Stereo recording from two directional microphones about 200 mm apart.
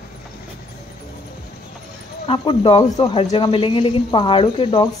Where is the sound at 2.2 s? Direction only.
25° left (ahead or behind).